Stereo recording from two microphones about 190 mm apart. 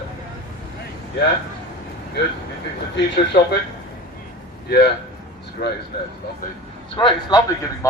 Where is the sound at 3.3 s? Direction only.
60° left (ahead or behind).